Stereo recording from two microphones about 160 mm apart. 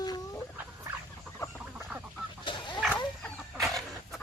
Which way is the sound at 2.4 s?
30° left (ahead or behind).